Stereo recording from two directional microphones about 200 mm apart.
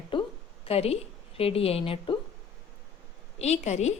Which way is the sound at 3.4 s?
35° left (ahead or behind).